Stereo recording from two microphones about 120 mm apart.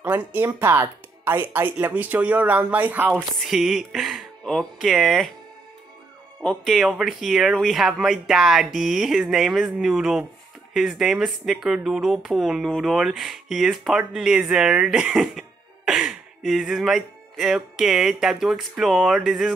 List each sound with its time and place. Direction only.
0.0 s speech: 15° right (ahead or behind)
3.2 s speech: centre (ahead or behind)
6.4 s speech: centre (ahead or behind)